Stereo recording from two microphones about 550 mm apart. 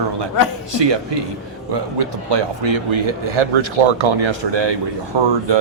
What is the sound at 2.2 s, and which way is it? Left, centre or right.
Speech, right.